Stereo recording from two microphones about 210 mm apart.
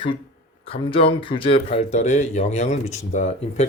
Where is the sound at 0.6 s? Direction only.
25° left (ahead or behind).